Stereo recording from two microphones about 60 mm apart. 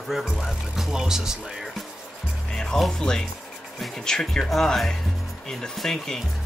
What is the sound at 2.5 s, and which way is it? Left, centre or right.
Speech, centre.